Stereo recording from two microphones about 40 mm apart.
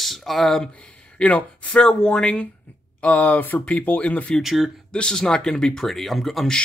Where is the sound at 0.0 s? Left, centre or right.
Centre.